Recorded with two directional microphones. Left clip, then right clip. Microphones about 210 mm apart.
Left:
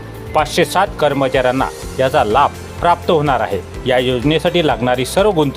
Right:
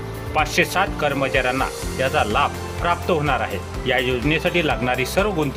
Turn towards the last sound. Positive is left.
turn(degrees=25)  # may be behind; listen again after turning